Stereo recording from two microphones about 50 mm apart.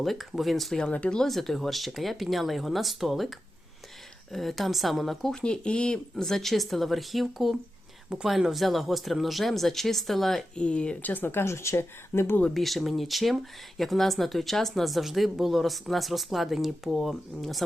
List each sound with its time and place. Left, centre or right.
0.0 s speech: centre
0.8 s speech: left
1.2 s speech: centre
5.3 s speech: centre
10.5 s speech: left
11.0 s speech: left
11.3 s speech: left
12.5 s speech: centre